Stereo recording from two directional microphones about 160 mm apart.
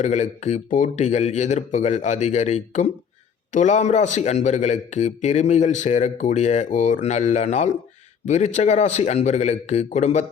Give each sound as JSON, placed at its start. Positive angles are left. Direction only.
{"t": 0.0, "sound": "a man's voice", "side_deg": 45}